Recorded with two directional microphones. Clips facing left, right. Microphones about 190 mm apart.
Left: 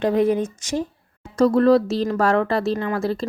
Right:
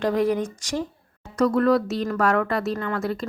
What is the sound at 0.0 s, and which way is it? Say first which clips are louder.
Speech: left 3 dB; 20° left (ahead or behind).